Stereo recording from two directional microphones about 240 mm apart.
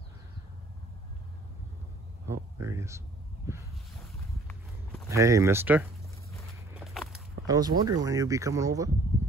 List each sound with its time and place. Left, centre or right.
2.6 s speech: centre
5.1 s speech: centre
6.7 s walk: centre
7.4 s speech: centre